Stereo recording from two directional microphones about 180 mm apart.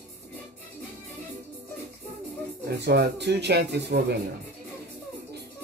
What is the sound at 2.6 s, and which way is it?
Speech, 65° right (ahead or behind).